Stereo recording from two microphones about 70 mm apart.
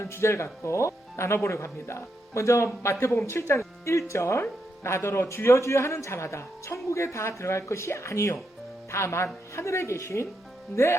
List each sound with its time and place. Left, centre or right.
0.0 s a woman's voice: left